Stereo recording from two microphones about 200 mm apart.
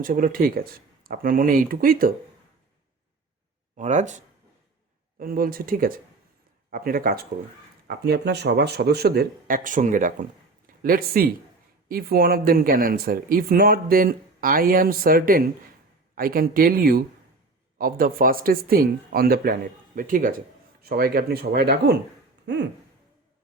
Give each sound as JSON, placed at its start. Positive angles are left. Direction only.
{"t": 0.0, "sound": "speech", "side_deg": -45}
{"t": 3.8, "sound": "speech", "side_deg": -35}
{"t": 5.2, "sound": "speech", "side_deg": -45}
{"t": 22.5, "sound": "a sound", "side_deg": -60}